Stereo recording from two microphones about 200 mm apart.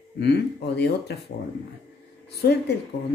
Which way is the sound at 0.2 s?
55° left (ahead or behind).